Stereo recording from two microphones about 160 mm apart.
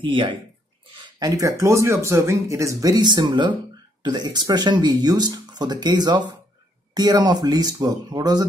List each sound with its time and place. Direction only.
0.0 s speech: 30° right (ahead or behind)